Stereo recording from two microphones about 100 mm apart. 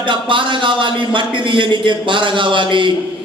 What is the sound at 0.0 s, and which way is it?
Speech, 55° right (ahead or behind).